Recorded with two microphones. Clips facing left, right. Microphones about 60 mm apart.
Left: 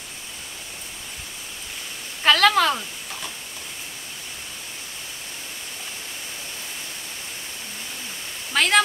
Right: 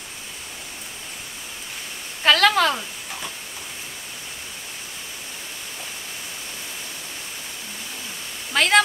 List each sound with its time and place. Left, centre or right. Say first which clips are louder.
2.2 s a woman's voice: even; centre
8.5 s a woman's voice: right 2 dB; centre